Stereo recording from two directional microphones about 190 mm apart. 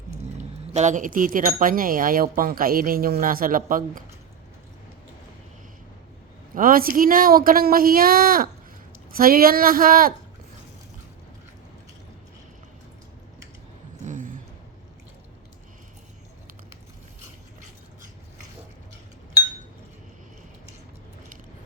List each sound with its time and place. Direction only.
0.7 s speech: 40° right (ahead or behind)
6.5 s speech: 45° right (ahead or behind)
14.0 s a sound: 40° right (ahead or behind)